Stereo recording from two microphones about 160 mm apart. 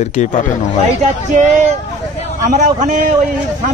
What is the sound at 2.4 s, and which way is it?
Speech, 50° right (ahead or behind).